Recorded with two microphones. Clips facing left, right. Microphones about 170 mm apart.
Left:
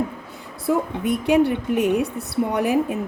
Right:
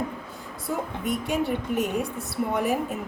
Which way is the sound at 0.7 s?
80° left.